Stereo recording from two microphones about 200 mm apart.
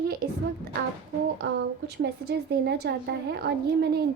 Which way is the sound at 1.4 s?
55° right (ahead or behind).